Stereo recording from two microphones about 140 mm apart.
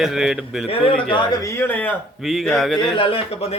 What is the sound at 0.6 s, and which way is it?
Speech, 40° left (ahead or behind).